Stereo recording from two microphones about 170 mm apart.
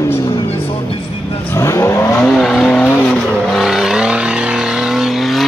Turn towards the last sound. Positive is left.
turn(degrees=0)  # may be behind; listen again after turning